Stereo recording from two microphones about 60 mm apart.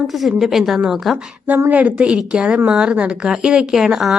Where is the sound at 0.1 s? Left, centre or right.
Centre.